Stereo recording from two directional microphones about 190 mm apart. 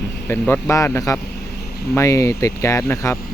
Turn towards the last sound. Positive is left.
turn(degrees=15)  # may be behind; listen again after turning